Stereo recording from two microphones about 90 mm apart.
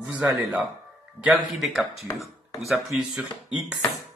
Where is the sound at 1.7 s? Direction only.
5° right (ahead or behind).